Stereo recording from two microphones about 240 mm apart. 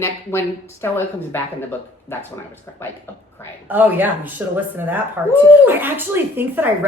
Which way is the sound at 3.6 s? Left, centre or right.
Centre.